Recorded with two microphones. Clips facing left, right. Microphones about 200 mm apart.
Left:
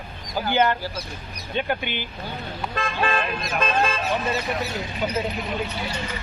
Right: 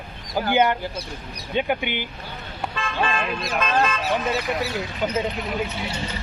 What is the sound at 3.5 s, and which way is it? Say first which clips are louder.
Speech: right 1 dB; 30° left (ahead or behind).